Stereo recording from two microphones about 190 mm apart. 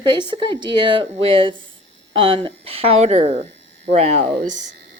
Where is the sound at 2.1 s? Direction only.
25° right (ahead or behind).